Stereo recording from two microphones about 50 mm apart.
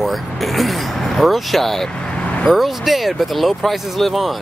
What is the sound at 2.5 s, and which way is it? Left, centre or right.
Speech, centre.